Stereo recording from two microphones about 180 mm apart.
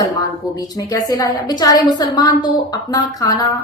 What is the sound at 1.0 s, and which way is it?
A woman's voice, 20° left (ahead or behind).